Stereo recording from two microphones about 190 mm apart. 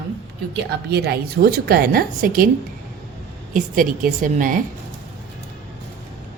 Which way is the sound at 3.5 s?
45° right (ahead or behind).